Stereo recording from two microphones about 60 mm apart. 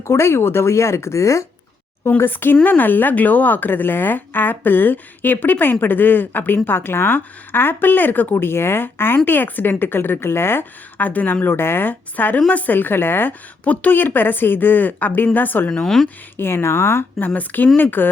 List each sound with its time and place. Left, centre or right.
0.0 s speech: left
2.0 s a woman's voice: left
15.7 s speech: centre
16.0 s speech: left
17.2 s a woman's voice: left